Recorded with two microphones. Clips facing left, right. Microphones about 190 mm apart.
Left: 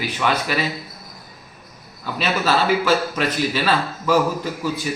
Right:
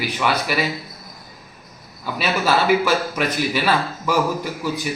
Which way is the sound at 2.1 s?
10° right (ahead or behind).